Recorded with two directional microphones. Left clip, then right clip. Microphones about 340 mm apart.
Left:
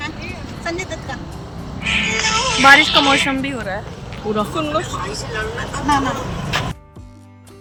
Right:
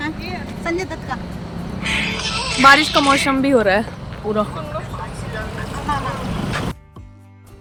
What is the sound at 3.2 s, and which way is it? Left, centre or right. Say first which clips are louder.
Speech: right 6 dB; centre.